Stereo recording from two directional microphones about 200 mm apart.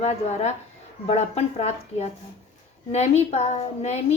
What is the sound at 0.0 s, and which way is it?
A woman's voice, 35° left (ahead or behind).